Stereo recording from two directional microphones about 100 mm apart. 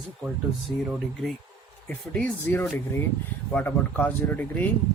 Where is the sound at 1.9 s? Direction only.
10° left (ahead or behind).